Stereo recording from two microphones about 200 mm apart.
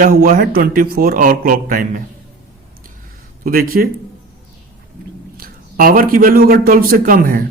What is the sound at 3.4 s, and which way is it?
Speech, 45° right (ahead or behind).